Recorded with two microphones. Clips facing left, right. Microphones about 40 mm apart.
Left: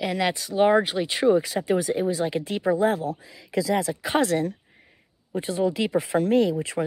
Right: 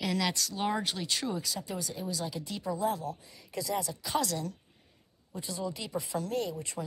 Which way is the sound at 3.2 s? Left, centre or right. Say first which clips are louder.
Left 11 dB; left.